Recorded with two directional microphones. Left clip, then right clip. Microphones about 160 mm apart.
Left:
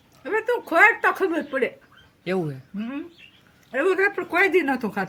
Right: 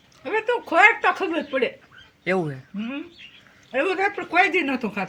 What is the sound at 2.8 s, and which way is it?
A woman's voice, 35° left (ahead or behind).